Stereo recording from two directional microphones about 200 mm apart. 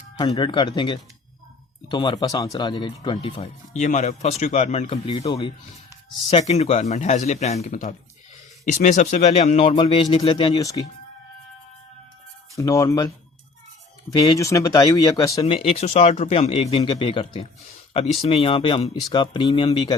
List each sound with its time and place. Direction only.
0.2 s speech: 25° left (ahead or behind)
12.5 s speech: 15° left (ahead or behind)
14.1 s speech: 15° left (ahead or behind)
15.4 s speech: 30° left (ahead or behind)